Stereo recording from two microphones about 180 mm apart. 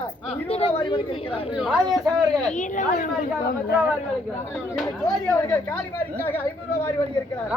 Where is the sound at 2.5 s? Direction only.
45° left (ahead or behind).